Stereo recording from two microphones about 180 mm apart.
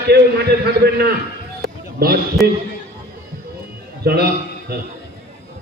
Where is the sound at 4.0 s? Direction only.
60° right (ahead or behind).